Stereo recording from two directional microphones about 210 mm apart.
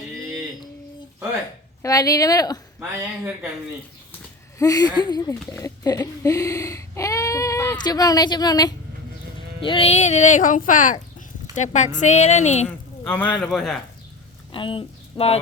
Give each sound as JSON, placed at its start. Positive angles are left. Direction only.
{"t": 1.8, "sound": "speech", "side_deg": 15}
{"t": 4.5, "sound": "speech", "side_deg": 15}
{"t": 12.6, "sound": "speech", "side_deg": 10}
{"t": 14.5, "sound": "speech", "side_deg": 25}